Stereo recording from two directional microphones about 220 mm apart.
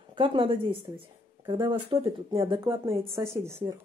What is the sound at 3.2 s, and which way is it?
Speech, 10° right (ahead or behind).